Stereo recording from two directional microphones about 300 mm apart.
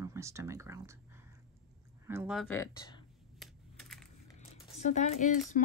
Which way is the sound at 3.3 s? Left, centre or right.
Centre.